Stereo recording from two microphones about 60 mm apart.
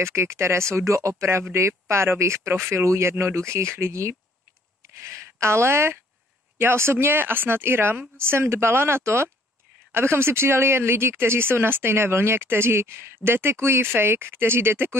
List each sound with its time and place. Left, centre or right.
0.0 s speech: right